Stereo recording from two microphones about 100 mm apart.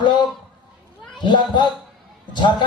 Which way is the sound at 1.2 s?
50° left (ahead or behind).